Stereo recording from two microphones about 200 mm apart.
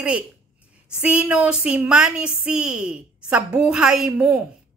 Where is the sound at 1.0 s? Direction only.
5° right (ahead or behind).